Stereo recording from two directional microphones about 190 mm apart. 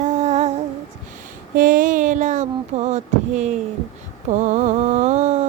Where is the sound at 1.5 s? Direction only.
45° right (ahead or behind).